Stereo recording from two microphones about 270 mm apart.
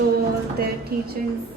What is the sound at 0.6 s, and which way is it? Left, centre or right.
Music, right.